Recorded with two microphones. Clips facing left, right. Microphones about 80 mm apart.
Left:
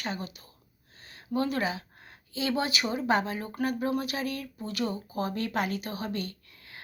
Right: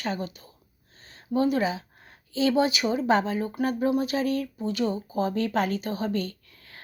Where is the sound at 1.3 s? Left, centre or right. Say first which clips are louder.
Right 5 dB; right.